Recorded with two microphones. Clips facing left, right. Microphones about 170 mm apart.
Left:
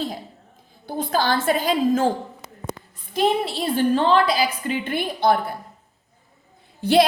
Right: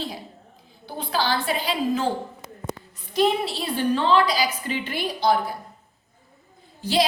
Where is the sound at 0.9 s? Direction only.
45° left (ahead or behind).